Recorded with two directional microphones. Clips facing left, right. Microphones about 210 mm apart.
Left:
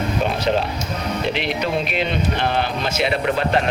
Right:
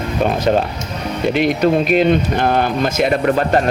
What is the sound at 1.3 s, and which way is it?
Speech, 45° right (ahead or behind).